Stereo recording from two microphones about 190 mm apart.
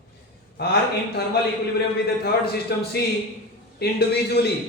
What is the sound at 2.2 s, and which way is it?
Speech, 55° left (ahead or behind).